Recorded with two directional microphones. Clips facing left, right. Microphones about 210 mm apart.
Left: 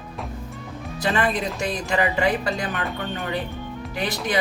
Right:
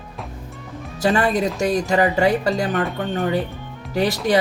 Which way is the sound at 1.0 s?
45° right (ahead or behind).